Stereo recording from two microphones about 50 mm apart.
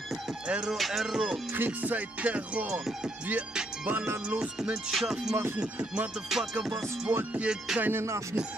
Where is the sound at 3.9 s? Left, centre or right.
Right.